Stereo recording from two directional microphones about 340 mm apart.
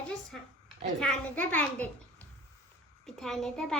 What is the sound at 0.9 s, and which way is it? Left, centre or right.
A child's voice, centre.